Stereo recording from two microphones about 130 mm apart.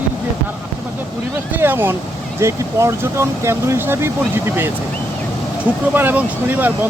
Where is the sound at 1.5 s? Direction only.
15° right (ahead or behind).